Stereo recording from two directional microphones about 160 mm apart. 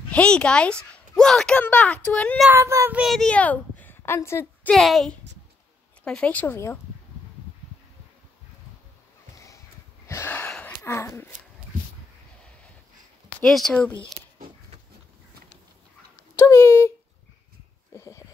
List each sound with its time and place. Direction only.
0.1 s a woman's voice: 5° left (ahead or behind)
2.5 s child singing: 15° right (ahead or behind)
3.0 s a woman's voice: centre (ahead or behind)
4.7 s a woman's voice: centre (ahead or behind)
10.0 s a sound: 15° left (ahead or behind)
10.8 s speech: 20° left (ahead or behind)
13.3 s speech: 5° left (ahead or behind)
16.3 s a woman's voice: 20° left (ahead or behind)
17.9 s a sound: 20° left (ahead or behind)